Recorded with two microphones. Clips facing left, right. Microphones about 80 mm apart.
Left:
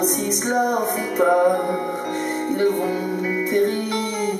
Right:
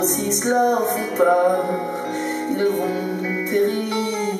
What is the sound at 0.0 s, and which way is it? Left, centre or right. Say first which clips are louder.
Music: right 1 dB; centre.